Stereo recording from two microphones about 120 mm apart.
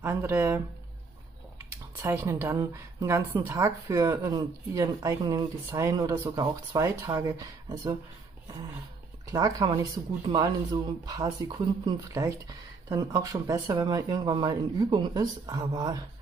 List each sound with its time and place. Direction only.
0.0 s speech: 20° right (ahead or behind)
2.0 s speech: 25° right (ahead or behind)
5.7 s speech: 20° right (ahead or behind)
9.2 s speech: 30° right (ahead or behind)